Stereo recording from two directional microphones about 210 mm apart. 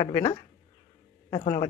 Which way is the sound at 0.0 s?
25° left (ahead or behind).